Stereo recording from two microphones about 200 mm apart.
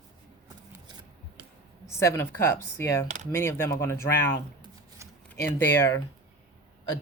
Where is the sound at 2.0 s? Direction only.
10° left (ahead or behind).